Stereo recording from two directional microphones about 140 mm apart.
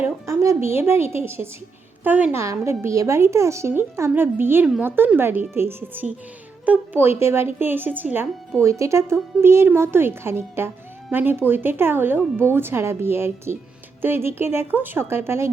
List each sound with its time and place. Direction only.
0.0 s a woman's voice: 20° right (ahead or behind)